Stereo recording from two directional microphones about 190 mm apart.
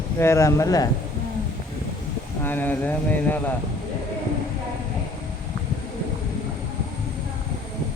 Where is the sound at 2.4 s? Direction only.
10° left (ahead or behind).